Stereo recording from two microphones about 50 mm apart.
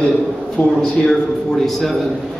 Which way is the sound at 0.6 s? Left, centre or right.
Centre.